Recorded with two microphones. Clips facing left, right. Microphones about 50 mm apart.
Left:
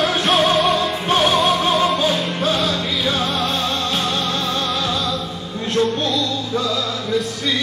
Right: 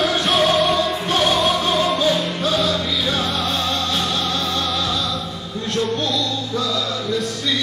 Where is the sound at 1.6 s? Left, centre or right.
Centre.